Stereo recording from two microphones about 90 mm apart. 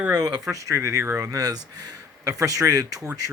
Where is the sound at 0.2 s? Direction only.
50° right (ahead or behind).